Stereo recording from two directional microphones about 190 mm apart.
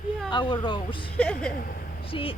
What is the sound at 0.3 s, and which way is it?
Speech, 25° left (ahead or behind).